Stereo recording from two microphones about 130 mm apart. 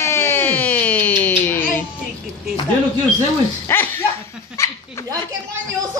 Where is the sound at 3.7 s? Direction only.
15° left (ahead or behind).